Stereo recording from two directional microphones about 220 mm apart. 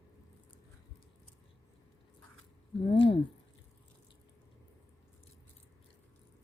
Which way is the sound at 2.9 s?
25° left (ahead or behind).